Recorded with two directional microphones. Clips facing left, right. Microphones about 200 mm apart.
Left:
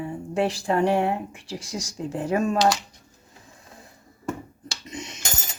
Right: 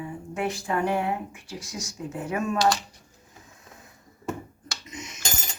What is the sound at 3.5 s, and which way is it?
Printer, 30° left (ahead or behind).